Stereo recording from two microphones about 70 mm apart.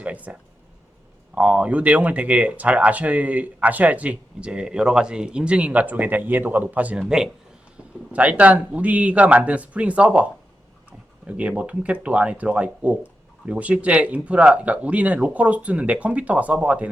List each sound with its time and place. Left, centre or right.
0.0 s a sound: centre
1.4 s speech: centre
8.1 s speech: centre
11.3 s speech: centre